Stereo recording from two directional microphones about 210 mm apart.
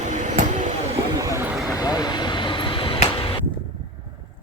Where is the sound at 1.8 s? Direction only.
20° left (ahead or behind).